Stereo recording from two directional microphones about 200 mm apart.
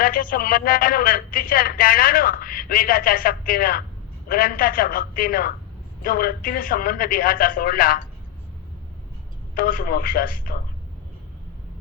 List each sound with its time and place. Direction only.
0.0 s speech: 45° left (ahead or behind)
9.6 s speech: 45° left (ahead or behind)